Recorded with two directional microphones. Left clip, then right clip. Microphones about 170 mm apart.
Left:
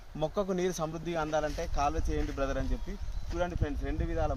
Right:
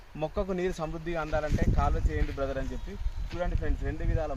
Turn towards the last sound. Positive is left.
turn(degrees=-15)  # may be behind; listen again after turning